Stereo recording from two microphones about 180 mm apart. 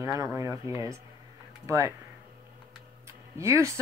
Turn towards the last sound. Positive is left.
turn(degrees=-15)  # may be behind; listen again after turning